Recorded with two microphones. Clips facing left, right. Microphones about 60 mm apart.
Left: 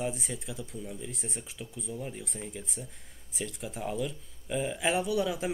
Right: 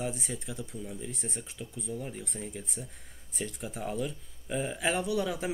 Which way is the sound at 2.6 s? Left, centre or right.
Centre.